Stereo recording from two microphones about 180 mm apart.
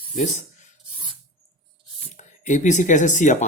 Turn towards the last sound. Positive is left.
turn(degrees=40)  # may be behind; listen again after turning